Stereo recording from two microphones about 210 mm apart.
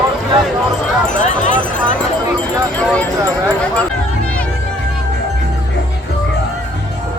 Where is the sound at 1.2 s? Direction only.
35° left (ahead or behind).